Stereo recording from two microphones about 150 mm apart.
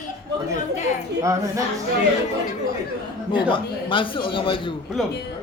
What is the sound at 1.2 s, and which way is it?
Speech, 20° right (ahead or behind).